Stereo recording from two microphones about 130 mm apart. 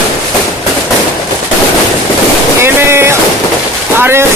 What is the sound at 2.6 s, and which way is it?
Boat, 20° right (ahead or behind).